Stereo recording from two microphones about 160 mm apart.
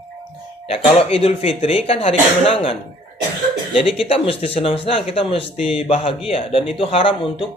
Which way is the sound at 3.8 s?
35° left (ahead or behind).